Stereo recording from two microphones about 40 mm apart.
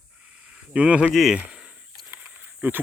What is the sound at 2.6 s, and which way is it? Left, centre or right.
Speech, right.